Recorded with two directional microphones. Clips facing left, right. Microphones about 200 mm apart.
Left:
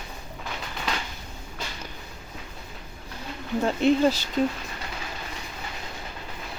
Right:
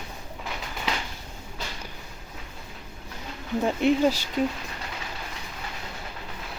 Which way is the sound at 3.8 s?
15° right (ahead or behind).